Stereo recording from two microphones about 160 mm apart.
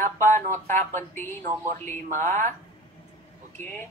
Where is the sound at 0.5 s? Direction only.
50° right (ahead or behind).